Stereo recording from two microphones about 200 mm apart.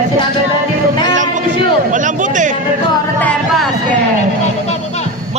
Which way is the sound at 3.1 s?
5° left (ahead or behind).